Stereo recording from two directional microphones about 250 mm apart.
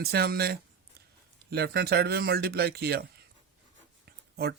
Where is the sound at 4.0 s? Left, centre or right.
Right.